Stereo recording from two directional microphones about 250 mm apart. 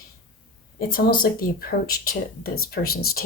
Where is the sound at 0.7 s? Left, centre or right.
Left.